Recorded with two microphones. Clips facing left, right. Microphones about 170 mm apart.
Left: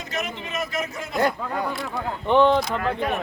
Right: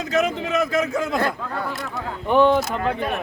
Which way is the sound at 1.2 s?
15° left (ahead or behind).